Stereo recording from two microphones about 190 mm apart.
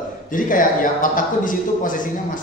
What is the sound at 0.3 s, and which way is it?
A man's voice, 45° left (ahead or behind).